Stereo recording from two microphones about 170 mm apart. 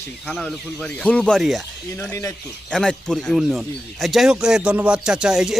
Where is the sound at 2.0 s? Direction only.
15° left (ahead or behind).